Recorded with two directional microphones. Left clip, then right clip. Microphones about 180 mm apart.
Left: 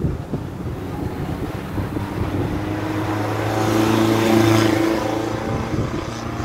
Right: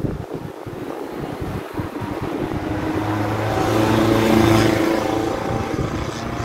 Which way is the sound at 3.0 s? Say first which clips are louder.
Right 1 dB; 50° left (ahead or behind).